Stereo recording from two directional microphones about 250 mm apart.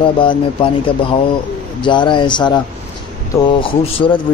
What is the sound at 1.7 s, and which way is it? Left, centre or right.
Speech, centre.